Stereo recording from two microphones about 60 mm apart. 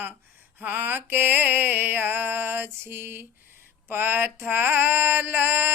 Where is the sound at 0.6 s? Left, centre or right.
Right.